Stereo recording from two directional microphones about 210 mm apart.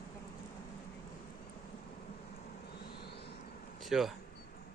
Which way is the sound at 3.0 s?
50° left (ahead or behind).